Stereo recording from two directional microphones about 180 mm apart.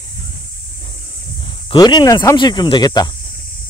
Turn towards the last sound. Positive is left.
turn(degrees=20)  # may be behind; listen again after turning